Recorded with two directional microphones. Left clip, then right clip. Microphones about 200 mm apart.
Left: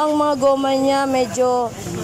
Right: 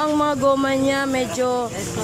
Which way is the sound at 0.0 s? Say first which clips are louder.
Left 2 dB; 5° left (ahead or behind).